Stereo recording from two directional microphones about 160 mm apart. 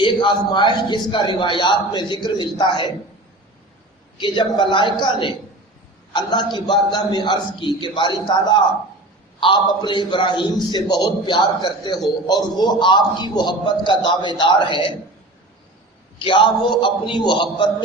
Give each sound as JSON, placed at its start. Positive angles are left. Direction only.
{"t": 0.0, "sound": "a man's voice", "side_deg": 30}
{"t": 4.2, "sound": "a man's voice", "side_deg": 30}
{"t": 16.1, "sound": "a man's voice", "side_deg": 30}